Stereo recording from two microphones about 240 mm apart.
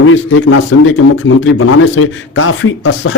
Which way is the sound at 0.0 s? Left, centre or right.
Left.